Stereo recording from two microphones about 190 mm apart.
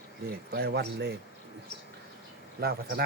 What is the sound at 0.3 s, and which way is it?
Speech, 55° right (ahead or behind).